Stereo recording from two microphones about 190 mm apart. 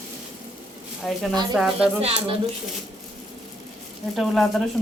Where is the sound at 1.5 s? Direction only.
5° right (ahead or behind).